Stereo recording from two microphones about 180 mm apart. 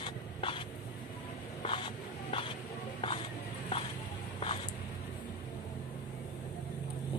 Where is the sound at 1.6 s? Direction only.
30° left (ahead or behind).